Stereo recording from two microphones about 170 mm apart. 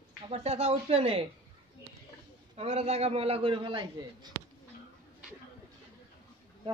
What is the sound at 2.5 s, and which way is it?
A man's voice, 40° right (ahead or behind).